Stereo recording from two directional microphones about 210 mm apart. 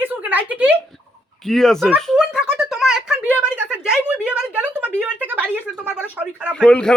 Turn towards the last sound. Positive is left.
turn(degrees=5)  # may be behind; listen again after turning